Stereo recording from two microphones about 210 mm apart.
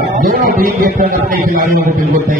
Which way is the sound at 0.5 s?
40° right (ahead or behind).